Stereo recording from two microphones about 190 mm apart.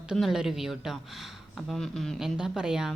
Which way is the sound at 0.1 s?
Centre (ahead or behind).